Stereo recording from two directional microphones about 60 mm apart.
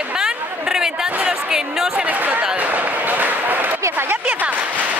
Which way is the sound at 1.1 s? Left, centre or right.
Centre.